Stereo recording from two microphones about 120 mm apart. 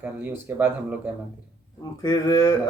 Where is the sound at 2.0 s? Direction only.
35° left (ahead or behind).